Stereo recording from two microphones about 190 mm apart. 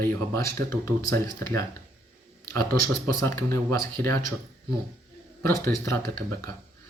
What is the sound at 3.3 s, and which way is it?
Speech, 15° left (ahead or behind).